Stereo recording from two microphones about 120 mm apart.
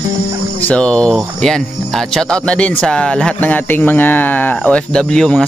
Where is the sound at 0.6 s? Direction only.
10° left (ahead or behind).